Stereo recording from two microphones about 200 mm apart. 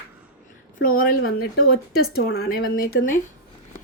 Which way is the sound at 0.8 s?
45° left (ahead or behind).